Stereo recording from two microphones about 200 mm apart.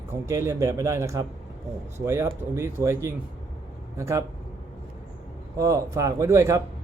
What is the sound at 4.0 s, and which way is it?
Speech, 15° right (ahead or behind).